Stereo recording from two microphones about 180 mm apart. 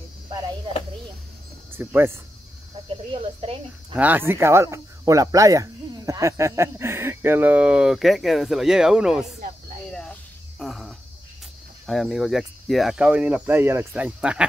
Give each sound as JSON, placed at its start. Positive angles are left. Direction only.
{"t": 1.7, "sound": "speech", "side_deg": -10}
{"t": 2.9, "sound": "speech", "side_deg": -30}
{"t": 3.9, "sound": "speech", "side_deg": -10}
{"t": 10.6, "sound": "a sound", "side_deg": 0}
{"t": 11.8, "sound": "speech", "side_deg": 0}